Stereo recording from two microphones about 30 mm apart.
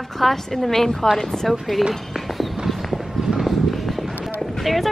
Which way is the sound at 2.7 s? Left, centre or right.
Centre.